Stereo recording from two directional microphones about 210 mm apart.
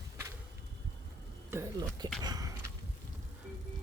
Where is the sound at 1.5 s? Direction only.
15° right (ahead or behind).